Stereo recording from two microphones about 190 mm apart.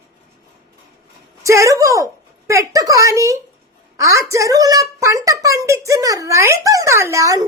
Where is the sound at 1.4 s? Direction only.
15° right (ahead or behind).